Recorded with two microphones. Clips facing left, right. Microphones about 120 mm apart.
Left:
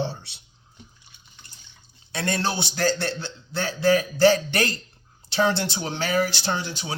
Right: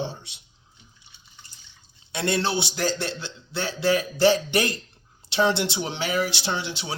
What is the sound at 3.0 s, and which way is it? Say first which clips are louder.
Speech: left 2 dB; 55° left (ahead or behind).